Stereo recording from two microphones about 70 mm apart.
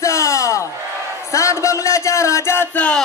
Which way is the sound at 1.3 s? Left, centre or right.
Left.